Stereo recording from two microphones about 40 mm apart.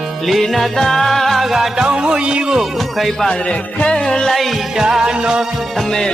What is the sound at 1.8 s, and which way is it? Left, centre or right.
Speech, right.